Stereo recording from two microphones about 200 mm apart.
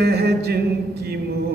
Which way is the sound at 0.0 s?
55° right (ahead or behind).